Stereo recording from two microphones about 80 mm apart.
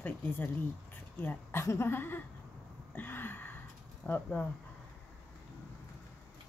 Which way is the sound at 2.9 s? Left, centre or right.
Left.